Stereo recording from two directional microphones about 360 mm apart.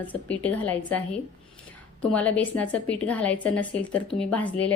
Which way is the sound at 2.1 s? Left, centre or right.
Centre.